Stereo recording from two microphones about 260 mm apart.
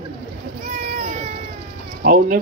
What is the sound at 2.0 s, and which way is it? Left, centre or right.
Speech, right.